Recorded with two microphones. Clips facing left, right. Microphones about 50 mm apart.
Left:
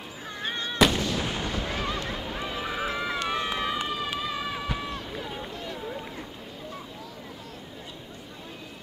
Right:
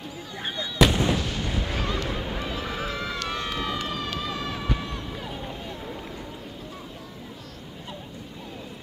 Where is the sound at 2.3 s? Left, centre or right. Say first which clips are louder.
Right 1 dB; centre.